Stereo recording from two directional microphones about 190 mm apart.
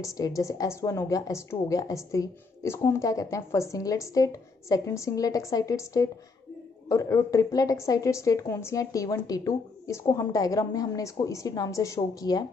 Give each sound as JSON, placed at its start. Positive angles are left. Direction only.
{"t": 0.0, "sound": "a woman's voice", "side_deg": 15}